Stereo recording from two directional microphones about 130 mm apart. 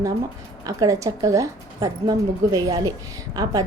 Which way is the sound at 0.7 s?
25° right (ahead or behind).